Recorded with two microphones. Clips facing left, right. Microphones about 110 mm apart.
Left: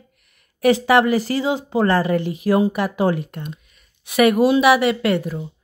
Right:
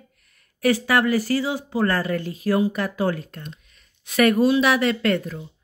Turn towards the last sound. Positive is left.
turn(degrees=15)  # may be behind; listen again after turning